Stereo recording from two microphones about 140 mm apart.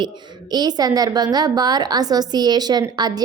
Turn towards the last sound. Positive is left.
turn(degrees=-30)  # may be behind; listen again after turning